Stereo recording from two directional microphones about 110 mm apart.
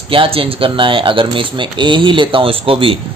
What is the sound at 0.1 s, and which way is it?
A man's voice, 55° right (ahead or behind).